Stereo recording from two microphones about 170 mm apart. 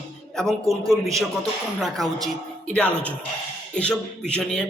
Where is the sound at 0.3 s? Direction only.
Centre (ahead or behind).